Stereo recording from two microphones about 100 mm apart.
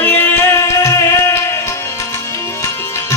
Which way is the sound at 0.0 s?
20° left (ahead or behind).